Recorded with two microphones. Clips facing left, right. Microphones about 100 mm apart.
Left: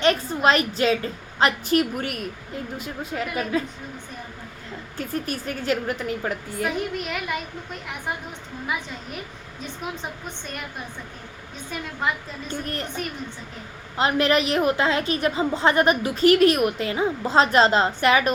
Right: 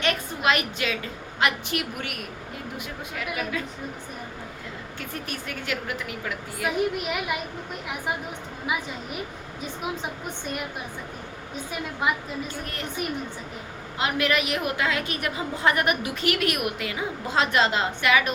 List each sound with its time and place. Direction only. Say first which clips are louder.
0.0 s a woman's voice: left 5 dB; 30° left (ahead or behind)
4.9 s a woman's voice: left 8 dB; 35° left (ahead or behind)
6.7 s a woman's voice: right 2 dB; 5° right (ahead or behind)
12.0 s a woman's voice: right 1 dB; 5° right (ahead or behind)
14.0 s a woman's voice: left 4 dB; 35° left (ahead or behind)